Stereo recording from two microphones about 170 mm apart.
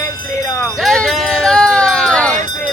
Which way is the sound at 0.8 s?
5° left (ahead or behind).